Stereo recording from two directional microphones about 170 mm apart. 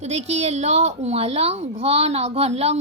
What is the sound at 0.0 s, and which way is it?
A woman's voice, 40° right (ahead or behind).